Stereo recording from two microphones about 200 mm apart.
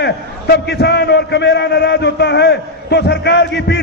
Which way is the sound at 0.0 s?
55° left (ahead or behind).